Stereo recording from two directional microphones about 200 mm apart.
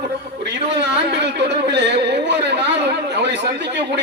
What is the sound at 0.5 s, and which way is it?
Speech, 60° right (ahead or behind).